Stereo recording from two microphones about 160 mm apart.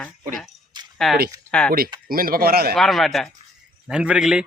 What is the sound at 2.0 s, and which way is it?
Speech, 65° right (ahead or behind).